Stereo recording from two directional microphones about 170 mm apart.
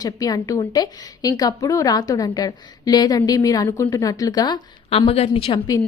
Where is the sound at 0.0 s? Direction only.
20° left (ahead or behind).